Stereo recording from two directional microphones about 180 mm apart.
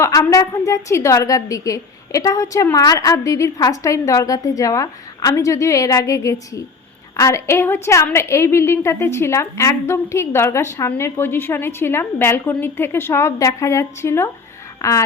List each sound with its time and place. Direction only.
0.0 s a woman's voice: 20° left (ahead or behind)